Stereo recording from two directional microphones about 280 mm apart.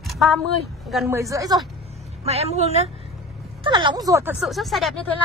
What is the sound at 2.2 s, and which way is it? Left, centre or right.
A woman's voice, right.